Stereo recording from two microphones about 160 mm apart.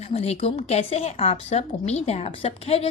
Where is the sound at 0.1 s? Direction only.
40° left (ahead or behind).